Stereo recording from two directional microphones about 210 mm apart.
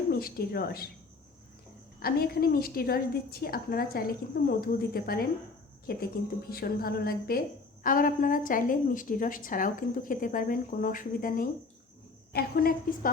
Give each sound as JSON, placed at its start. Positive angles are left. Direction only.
{"t": 0.1, "sound": "speech", "side_deg": 45}
{"t": 2.0, "sound": "a woman's voice", "side_deg": 45}